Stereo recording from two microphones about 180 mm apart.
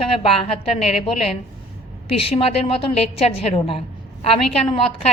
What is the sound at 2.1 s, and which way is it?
A woman's voice, 35° left (ahead or behind).